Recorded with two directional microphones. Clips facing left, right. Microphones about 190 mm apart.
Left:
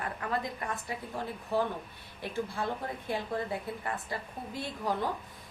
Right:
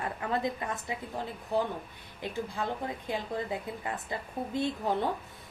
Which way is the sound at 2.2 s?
20° right (ahead or behind).